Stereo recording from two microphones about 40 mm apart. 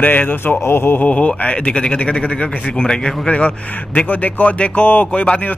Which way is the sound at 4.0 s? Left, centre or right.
Left.